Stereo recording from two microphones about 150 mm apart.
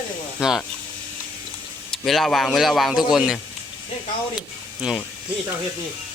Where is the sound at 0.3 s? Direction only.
5° right (ahead or behind).